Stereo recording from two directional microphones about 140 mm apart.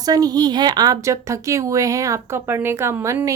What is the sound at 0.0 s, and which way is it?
Speech, 25° right (ahead or behind).